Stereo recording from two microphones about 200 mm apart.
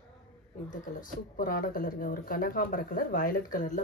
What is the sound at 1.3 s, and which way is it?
Speech, 45° left (ahead or behind).